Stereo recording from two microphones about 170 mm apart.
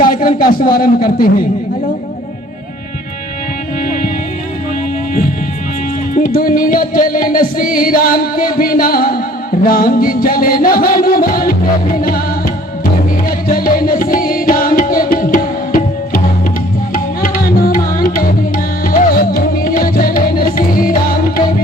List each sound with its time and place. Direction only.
0.0 s music: 55° left (ahead or behind)
3.8 s music: 55° left (ahead or behind)
6.1 s music: 55° left (ahead or behind)